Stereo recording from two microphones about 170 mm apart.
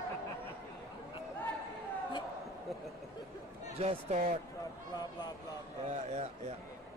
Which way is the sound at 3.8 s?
45° right (ahead or behind).